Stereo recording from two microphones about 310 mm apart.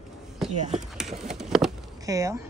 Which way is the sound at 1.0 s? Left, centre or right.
Centre.